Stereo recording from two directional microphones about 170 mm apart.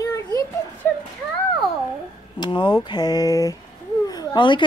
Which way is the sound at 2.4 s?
30° left (ahead or behind).